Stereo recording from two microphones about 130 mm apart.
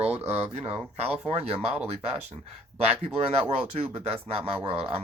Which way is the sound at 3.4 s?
45° right (ahead or behind).